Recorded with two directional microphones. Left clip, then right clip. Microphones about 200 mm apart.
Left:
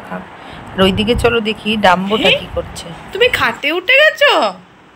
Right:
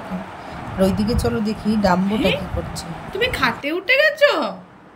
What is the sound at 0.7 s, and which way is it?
Speech, 30° left (ahead or behind).